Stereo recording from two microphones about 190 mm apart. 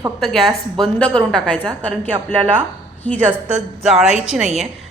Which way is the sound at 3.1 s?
10° left (ahead or behind).